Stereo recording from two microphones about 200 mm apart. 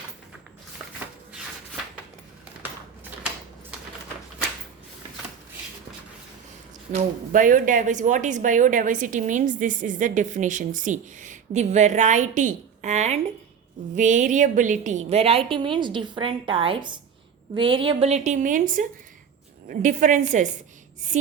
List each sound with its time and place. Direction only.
6.9 s a woman's voice: 40° right (ahead or behind)